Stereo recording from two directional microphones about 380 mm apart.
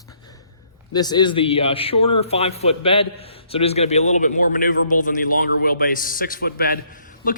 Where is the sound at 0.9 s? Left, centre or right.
Centre.